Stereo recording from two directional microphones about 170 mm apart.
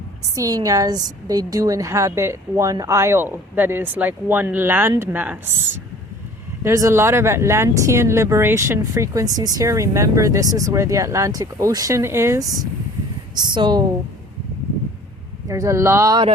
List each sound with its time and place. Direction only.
0.3 s speech: 20° right (ahead or behind)
6.7 s speech: 15° right (ahead or behind)
15.4 s speech: 20° right (ahead or behind)